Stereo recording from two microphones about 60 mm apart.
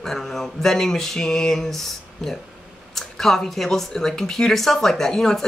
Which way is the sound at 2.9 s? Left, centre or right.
Centre.